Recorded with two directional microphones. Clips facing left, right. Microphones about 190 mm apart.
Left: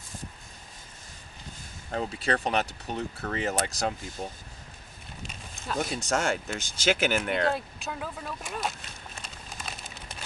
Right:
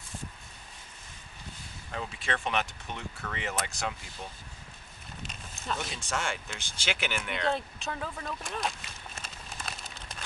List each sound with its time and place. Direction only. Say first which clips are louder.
1.9 s speech: left 6 dB; 40° left (ahead or behind)
5.8 s speech: left 11 dB; 40° left (ahead or behind)
7.5 s speech: even; 5° left (ahead or behind)
9.2 s a sound: left 1 dB; centre (ahead or behind)